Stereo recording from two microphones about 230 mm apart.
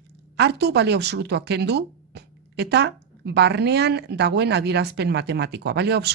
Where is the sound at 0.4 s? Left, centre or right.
Right.